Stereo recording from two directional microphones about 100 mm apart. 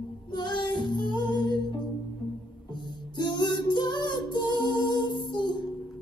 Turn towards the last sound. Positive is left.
turn(degrees=50)  # may be behind; listen again after turning